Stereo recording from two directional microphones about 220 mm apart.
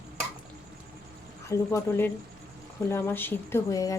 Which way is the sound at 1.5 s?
15° left (ahead or behind).